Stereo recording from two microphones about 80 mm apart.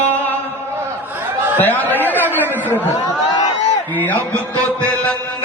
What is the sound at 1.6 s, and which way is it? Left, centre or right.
Music, left.